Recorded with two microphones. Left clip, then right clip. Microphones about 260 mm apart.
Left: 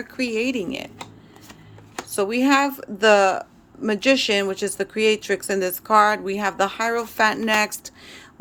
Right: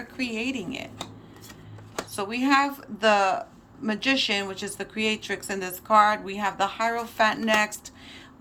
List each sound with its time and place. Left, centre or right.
0.2 s speech: centre
2.0 s speech: left